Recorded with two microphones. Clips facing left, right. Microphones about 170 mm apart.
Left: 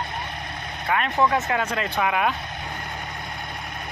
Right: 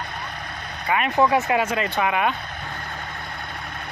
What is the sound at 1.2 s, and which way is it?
Speech, 15° right (ahead or behind).